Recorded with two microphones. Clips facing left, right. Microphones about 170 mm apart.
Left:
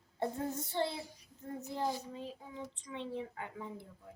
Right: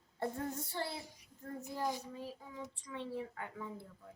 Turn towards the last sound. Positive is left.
turn(degrees=20)  # may be behind; listen again after turning